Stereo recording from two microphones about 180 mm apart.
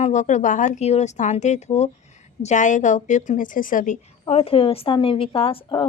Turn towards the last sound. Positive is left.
turn(degrees=30)  # may be behind; listen again after turning